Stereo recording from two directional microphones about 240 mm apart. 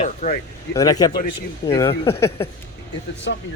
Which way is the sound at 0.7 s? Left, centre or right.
Centre.